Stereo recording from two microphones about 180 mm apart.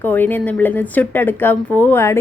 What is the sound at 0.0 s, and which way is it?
Speech, 10° left (ahead or behind).